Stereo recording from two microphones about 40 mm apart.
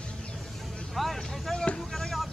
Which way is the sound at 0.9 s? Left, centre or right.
Centre.